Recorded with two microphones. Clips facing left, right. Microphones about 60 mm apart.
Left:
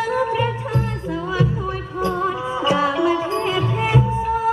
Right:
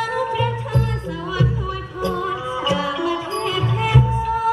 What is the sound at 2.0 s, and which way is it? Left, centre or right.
Music, left.